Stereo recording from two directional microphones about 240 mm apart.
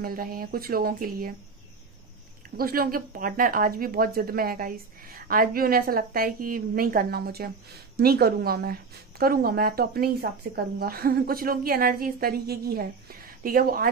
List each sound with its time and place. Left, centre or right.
0.0 s speech: right
2.5 s speech: right